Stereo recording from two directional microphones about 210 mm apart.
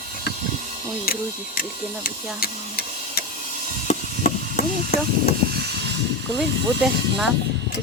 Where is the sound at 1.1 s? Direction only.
45° left (ahead or behind).